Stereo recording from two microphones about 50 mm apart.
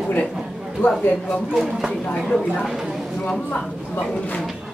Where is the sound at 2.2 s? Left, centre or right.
Centre.